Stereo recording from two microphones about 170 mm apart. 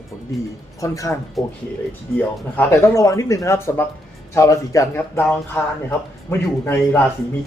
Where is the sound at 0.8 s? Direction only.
20° left (ahead or behind).